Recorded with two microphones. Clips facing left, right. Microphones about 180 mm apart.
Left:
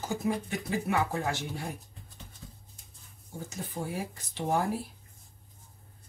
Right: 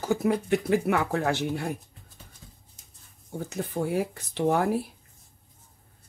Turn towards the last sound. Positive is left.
turn(degrees=-65)  # may be behind; listen again after turning